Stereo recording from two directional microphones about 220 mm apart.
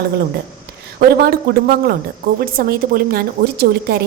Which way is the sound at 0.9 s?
45° right (ahead or behind).